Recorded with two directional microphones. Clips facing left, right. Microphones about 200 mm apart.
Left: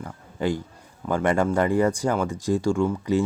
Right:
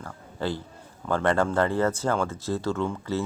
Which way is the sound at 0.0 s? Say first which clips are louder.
Left 4 dB; 15° left (ahead or behind).